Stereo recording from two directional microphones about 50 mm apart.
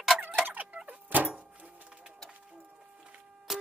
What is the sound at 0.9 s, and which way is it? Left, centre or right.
Vehicle, right.